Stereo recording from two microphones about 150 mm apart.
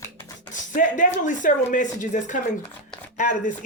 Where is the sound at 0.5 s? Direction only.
60° left (ahead or behind).